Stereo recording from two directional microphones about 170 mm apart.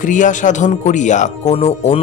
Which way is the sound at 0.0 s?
50° left (ahead or behind).